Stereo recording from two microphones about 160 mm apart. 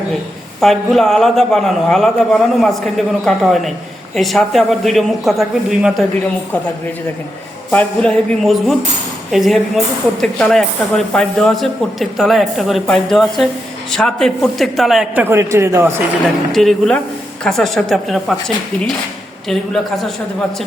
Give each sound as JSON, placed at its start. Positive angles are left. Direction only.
{"t": 0.6, "sound": "speech", "side_deg": 0}
{"t": 7.7, "sound": "speech", "side_deg": 10}
{"t": 15.2, "sound": "a man's voice", "side_deg": -15}
{"t": 16.5, "sound": "speech", "side_deg": 0}